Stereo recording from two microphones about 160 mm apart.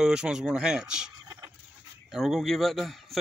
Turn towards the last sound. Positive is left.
turn(degrees=0)  # may be behind; listen again after turning